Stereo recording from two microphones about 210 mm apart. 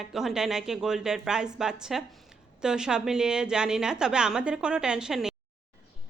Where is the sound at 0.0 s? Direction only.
Centre (ahead or behind).